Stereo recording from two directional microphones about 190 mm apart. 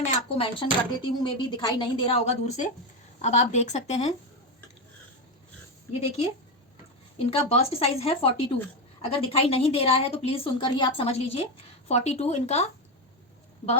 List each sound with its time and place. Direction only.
0.3 s a woman's voice: 30° left (ahead or behind)
5.9 s a woman's voice: 35° left (ahead or behind)
7.3 s a woman's voice: 30° left (ahead or behind)